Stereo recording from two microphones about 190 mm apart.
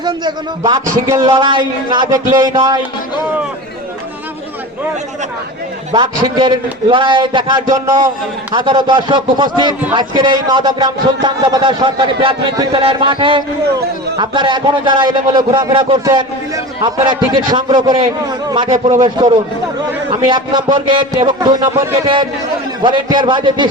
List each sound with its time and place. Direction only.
0.0 s a man's voice: 20° right (ahead or behind)
5.9 s a man's voice: 25° right (ahead or behind)
18.7 s a man's voice: 40° right (ahead or behind)
20.1 s a man's voice: 25° right (ahead or behind)